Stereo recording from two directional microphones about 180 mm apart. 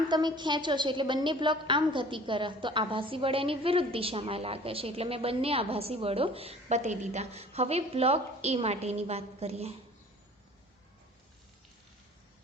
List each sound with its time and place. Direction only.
0.1 s a woman's voice: 25° right (ahead or behind)